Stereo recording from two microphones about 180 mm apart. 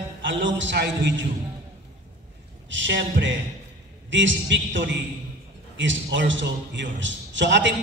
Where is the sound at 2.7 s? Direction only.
90° right.